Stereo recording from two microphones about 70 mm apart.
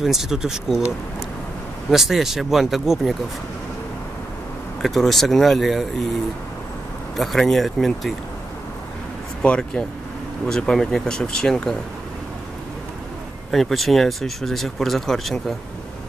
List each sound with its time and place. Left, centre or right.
0.0 s speech: centre
1.9 s speech: centre
4.8 s speech: centre
7.2 s speech: centre
9.4 s speech: centre
13.5 s speech: centre